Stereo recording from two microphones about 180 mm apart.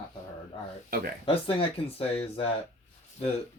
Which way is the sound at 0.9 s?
55° right (ahead or behind).